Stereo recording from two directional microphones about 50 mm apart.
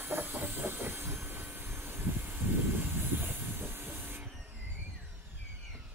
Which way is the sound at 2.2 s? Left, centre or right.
Right.